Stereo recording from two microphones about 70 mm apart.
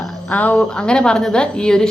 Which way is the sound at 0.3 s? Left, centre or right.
Left.